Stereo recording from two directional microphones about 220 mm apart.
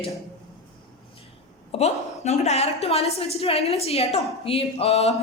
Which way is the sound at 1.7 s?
30° left (ahead or behind).